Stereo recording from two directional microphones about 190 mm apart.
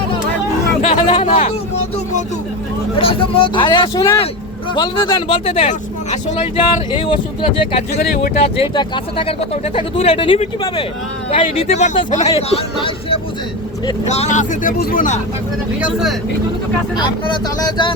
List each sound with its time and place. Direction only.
0.8 s a sound: 30° left (ahead or behind)
3.0 s speech: 30° left (ahead or behind)
7.9 s speech: 50° left (ahead or behind)
8.4 s speech: 30° left (ahead or behind)
15.8 s speech: 5° right (ahead or behind)
17.6 s speech: 25° left (ahead or behind)